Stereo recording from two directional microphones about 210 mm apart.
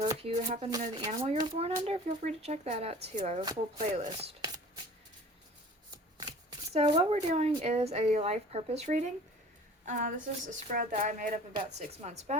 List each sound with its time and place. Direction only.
0.0 s a woman's voice: 25° right (ahead or behind)
4.4 s chopping: 20° right (ahead or behind)
6.7 s a woman's voice: 25° right (ahead or behind)